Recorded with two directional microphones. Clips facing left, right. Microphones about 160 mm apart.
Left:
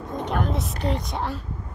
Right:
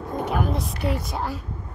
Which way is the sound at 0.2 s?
5° right (ahead or behind).